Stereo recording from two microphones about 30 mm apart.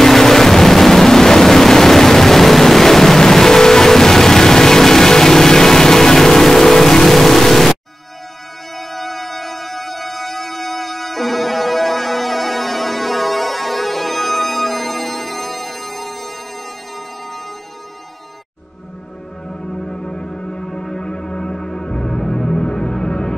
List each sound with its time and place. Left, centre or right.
0.0 s vehicle: centre
8.7 s music: centre
19.7 s music: left
21.0 s music: left